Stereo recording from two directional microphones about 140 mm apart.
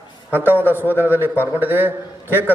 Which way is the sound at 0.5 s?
15° right (ahead or behind).